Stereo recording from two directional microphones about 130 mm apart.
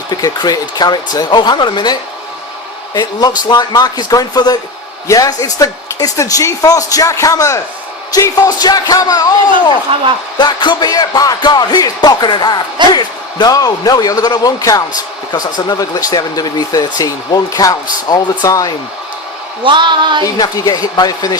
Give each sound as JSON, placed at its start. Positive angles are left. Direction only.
{"t": 0.1, "sound": "speech", "side_deg": 30}
{"t": 9.9, "sound": "a woman's voice", "side_deg": -40}
{"t": 10.3, "sound": "speech", "side_deg": 35}
{"t": 19.6, "sound": "a woman's voice", "side_deg": -35}
{"t": 20.2, "sound": "speech", "side_deg": 30}